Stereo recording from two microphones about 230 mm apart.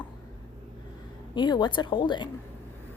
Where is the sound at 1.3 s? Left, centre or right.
Centre.